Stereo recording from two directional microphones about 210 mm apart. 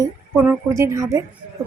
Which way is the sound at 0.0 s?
15° right (ahead or behind).